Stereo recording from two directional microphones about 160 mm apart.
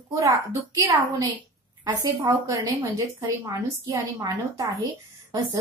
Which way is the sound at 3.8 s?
20° right (ahead or behind).